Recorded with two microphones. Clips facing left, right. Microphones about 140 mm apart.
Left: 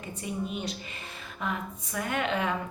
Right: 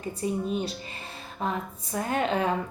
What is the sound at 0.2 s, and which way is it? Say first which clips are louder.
A woman's voice: right 5 dB; 35° right (ahead or behind).